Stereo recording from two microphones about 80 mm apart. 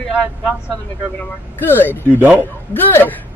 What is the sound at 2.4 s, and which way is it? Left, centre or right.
Speech, left.